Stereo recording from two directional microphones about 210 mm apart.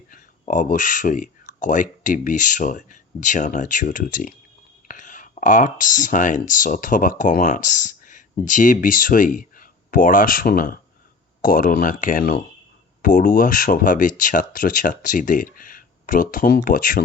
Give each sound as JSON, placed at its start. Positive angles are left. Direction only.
{"t": 0.1, "sound": "speech", "side_deg": 35}